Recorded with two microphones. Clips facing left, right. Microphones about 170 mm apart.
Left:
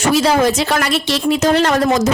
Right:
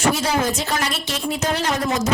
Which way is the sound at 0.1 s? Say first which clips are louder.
Left 7 dB; 90° left.